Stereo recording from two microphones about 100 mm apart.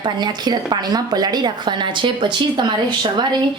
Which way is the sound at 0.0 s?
45° right (ahead or behind).